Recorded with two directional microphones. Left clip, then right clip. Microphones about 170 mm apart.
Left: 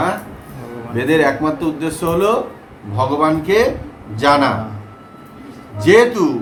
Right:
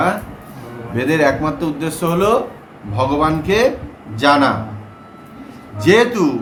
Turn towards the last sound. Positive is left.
turn(degrees=-20)  # may be behind; listen again after turning